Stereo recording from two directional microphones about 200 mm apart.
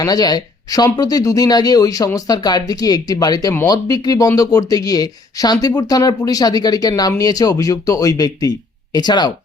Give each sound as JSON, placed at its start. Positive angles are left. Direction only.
{"t": 0.0, "sound": "speech", "side_deg": 20}